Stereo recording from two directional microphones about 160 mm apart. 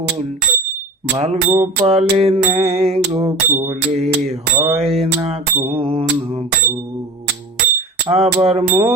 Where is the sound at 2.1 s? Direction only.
40° right (ahead or behind).